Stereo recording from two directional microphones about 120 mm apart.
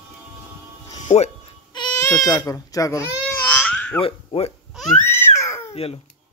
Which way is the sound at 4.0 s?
55° left (ahead or behind).